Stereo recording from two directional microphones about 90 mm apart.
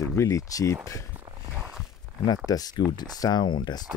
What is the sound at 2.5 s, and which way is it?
Speech, 45° left (ahead or behind).